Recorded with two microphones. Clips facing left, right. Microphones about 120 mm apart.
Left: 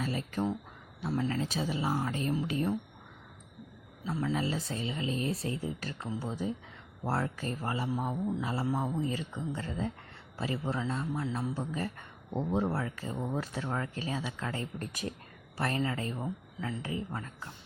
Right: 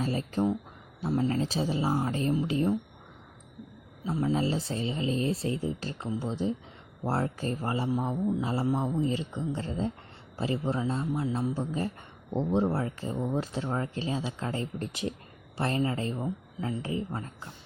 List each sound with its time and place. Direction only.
0.0 s speech: 35° right (ahead or behind)
4.0 s speech: 20° right (ahead or behind)